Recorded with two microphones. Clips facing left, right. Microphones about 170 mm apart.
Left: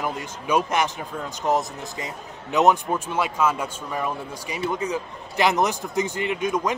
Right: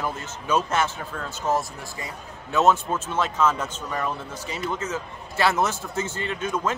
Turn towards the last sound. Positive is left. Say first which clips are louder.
# left 3 dB
turn(degrees=15)  # may be behind; listen again after turning